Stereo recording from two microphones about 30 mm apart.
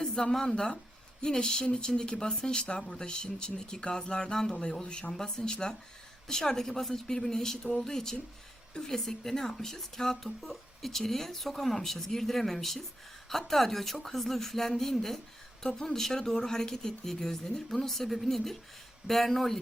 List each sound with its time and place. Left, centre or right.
0.0 s a sound: left
0.4 s speech: left
10.2 s speech: centre